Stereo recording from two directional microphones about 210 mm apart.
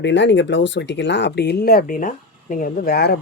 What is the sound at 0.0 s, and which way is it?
Speech, 60° left (ahead or behind).